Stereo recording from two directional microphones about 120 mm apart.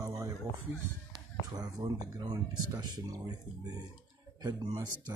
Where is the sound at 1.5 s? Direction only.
30° right (ahead or behind).